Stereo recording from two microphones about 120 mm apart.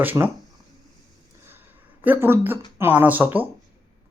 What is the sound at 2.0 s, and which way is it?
Speech, 20° right (ahead or behind).